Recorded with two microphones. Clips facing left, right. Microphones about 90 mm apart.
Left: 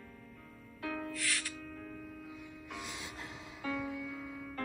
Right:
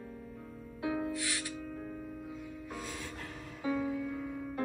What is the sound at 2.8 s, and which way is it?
Music, 10° left (ahead or behind).